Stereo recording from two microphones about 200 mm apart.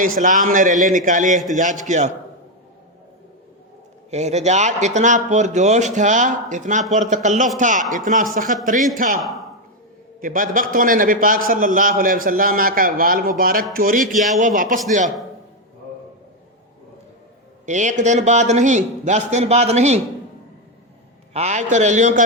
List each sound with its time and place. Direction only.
0.2 s speech: 40° right (ahead or behind)
4.1 s speech: 35° right (ahead or behind)
9.2 s a sound: centre (ahead or behind)
10.2 s a man's voice: 45° right (ahead or behind)
17.7 s speech: 35° right (ahead or behind)
21.3 s speech: 35° right (ahead or behind)